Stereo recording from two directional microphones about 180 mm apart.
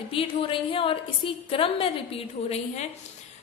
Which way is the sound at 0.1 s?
30° left (ahead or behind).